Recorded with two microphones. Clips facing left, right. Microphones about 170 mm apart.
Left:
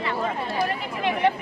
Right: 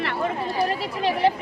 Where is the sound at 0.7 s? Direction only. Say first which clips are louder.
Right 2 dB; 35° right (ahead or behind).